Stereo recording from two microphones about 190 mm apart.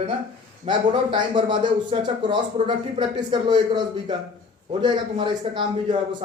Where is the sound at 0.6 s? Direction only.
25° right (ahead or behind).